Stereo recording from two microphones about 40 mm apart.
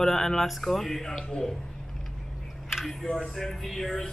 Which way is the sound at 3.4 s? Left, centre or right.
Centre.